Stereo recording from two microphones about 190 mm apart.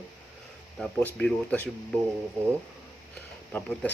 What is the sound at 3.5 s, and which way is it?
Speech, 10° left (ahead or behind).